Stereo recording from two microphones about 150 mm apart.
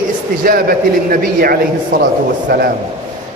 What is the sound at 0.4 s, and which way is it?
A man's voice, 75° right (ahead or behind).